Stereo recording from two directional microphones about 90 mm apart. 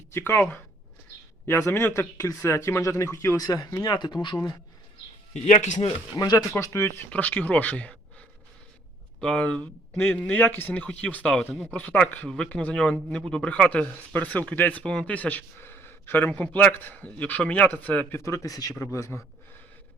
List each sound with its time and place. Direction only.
0.1 s speech: 25° left (ahead or behind)
3.9 s speech: 55° left (ahead or behind)
6.1 s speech: 40° left (ahead or behind)
7.1 s a man's voice: 15° left (ahead or behind)
9.2 s a man's voice: 15° left (ahead or behind)
9.9 s a man's voice: 25° left (ahead or behind)
18.2 s speech: 35° left (ahead or behind)